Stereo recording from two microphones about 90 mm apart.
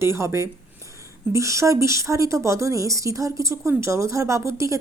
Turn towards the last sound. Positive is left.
turn(degrees=-35)  # may be behind; listen again after turning